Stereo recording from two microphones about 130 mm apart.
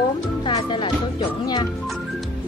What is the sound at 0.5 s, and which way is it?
Music, 40° left (ahead or behind).